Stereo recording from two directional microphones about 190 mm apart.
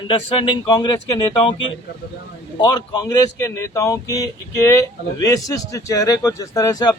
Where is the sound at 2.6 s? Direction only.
20° left (ahead or behind).